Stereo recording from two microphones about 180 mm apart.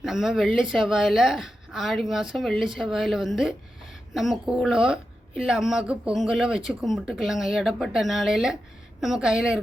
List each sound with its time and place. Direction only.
0.0 s a woman's voice: centre (ahead or behind)